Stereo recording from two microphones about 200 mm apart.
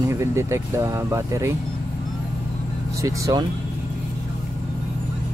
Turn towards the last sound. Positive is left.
turn(degrees=-15)  # may be behind; listen again after turning